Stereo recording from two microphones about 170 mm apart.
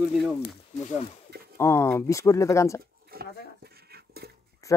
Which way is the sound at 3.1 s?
65° right (ahead or behind).